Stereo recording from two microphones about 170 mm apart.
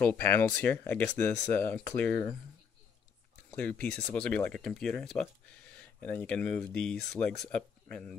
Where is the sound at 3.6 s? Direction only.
10° left (ahead or behind).